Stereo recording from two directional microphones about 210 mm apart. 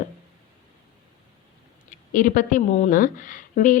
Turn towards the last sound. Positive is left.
turn(degrees=40)  # may be behind; listen again after turning